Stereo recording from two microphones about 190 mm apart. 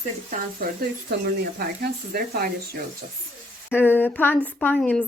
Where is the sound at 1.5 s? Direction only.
55° right (ahead or behind).